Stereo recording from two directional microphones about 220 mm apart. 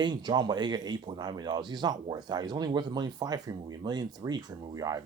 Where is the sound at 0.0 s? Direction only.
20° right (ahead or behind).